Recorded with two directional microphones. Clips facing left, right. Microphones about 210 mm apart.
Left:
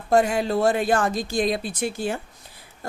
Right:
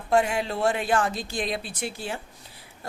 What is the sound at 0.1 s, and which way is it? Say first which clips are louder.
A woman's voice: left 4 dB; 40° left (ahead or behind).